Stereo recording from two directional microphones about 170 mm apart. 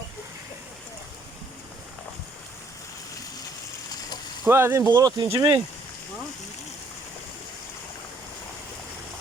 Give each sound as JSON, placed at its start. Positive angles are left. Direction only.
{"t": 4.4, "sound": "speech", "side_deg": -15}